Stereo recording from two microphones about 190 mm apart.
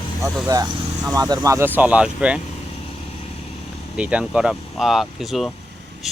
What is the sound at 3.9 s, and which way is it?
Speech, 5° right (ahead or behind).